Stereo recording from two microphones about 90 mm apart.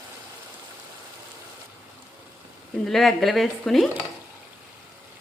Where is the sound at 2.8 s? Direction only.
5° left (ahead or behind).